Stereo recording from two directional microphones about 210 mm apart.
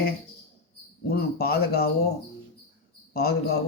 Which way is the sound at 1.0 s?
50° left (ahead or behind).